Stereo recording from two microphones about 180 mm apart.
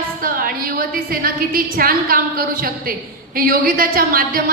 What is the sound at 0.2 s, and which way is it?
A woman's voice, 55° right (ahead or behind).